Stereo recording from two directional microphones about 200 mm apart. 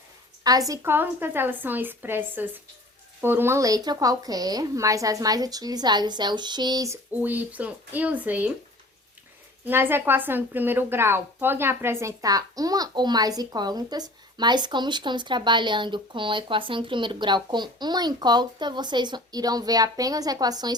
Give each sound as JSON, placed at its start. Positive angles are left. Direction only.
{"t": 0.4, "sound": "a woman's voice", "side_deg": -20}
{"t": 9.6, "sound": "a woman's voice", "side_deg": -10}